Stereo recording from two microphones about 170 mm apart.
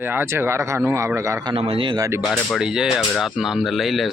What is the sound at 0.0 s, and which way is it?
A man's voice, 10° right (ahead or behind).